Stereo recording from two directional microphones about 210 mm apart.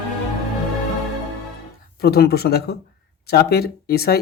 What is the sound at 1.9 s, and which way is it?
Speech, 50° left (ahead or behind).